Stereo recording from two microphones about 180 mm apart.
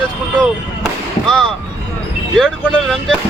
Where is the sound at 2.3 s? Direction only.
5° left (ahead or behind).